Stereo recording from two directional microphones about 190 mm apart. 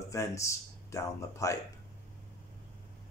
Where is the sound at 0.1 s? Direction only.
15° left (ahead or behind).